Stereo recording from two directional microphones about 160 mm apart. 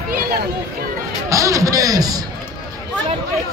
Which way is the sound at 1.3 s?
20° right (ahead or behind).